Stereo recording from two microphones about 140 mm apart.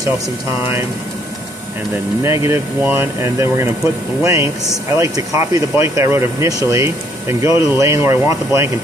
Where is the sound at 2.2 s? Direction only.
20° right (ahead or behind).